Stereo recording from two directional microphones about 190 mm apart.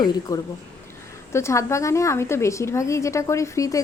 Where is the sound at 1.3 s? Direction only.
15° left (ahead or behind).